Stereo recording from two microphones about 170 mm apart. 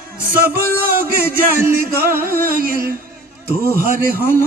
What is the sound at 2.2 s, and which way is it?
Speech, 60° right (ahead or behind).